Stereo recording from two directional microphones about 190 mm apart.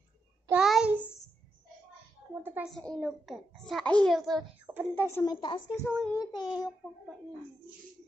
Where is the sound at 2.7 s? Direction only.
5° left (ahead or behind).